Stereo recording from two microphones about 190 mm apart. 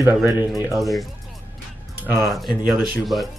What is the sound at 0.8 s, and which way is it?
Speech, centre (ahead or behind).